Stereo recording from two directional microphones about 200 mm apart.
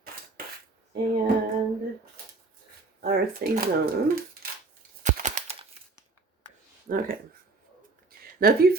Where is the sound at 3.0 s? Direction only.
50° right (ahead or behind).